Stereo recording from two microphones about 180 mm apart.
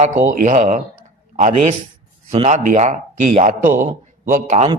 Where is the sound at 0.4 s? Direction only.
40° right (ahead or behind).